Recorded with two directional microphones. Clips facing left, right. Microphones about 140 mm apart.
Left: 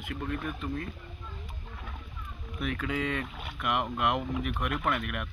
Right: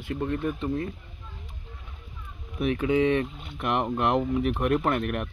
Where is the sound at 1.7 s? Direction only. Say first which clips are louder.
Left 4 dB; 90° left.